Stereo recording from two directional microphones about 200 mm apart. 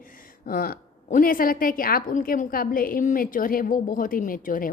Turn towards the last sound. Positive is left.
turn(degrees=45)  # may be behind; listen again after turning